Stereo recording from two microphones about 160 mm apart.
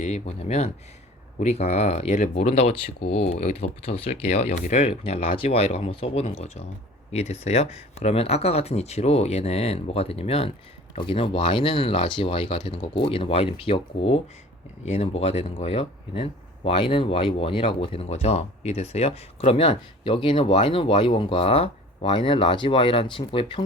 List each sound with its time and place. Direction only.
0.0 s speech: 45° left (ahead or behind)